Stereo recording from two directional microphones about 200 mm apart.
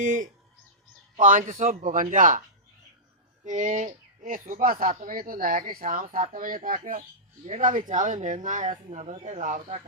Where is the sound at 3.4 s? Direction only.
40° right (ahead or behind).